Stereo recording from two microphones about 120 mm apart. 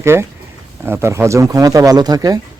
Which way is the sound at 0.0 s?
20° right (ahead or behind).